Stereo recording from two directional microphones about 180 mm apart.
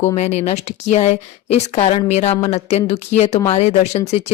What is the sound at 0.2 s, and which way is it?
A woman's voice, 40° left (ahead or behind).